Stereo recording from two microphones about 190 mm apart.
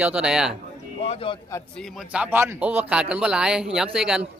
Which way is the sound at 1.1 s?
30° left (ahead or behind).